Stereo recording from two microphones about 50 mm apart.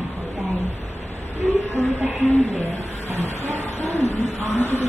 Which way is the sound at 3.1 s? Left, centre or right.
Left.